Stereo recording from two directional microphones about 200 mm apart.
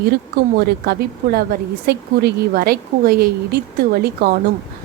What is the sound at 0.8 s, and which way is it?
Speech, 50° right (ahead or behind).